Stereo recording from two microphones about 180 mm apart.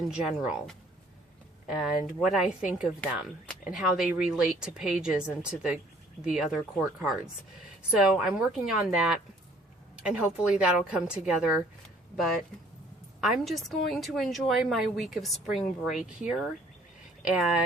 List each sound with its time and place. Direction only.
0.1 s a woman's voice: 5° right (ahead or behind)
17.2 s speech: 5° right (ahead or behind)